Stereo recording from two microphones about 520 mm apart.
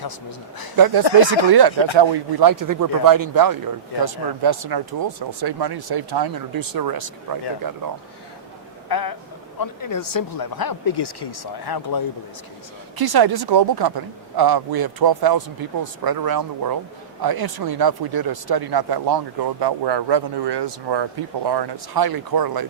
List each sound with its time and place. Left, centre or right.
0.0 s a man's voice: left
1.3 s speech: right
8.9 s speech: left
13.0 s speech: right